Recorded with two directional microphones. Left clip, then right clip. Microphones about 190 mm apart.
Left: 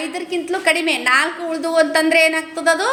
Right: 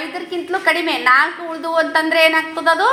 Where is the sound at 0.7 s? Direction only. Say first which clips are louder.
Right 2 dB; 30° left (ahead or behind).